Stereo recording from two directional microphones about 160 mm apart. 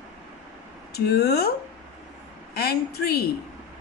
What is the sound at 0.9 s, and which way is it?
Speech, 90° left.